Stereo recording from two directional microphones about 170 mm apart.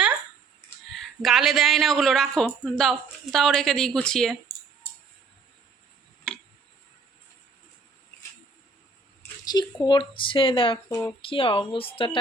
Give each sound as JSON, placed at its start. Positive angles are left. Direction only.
{"t": 0.9, "sound": "speech", "side_deg": 0}
{"t": 6.3, "sound": "tick-tock", "side_deg": 5}
{"t": 9.4, "sound": "speech", "side_deg": 25}